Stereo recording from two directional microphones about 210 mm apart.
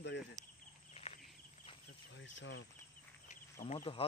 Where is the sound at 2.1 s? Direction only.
60° left (ahead or behind).